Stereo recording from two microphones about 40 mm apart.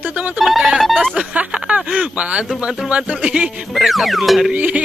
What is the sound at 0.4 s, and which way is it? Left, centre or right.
Speech, centre.